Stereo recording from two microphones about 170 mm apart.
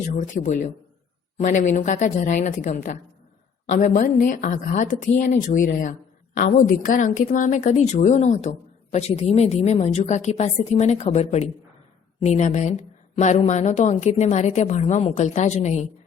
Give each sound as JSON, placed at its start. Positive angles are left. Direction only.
{"t": 0.2, "sound": "a woman's voice", "side_deg": 50}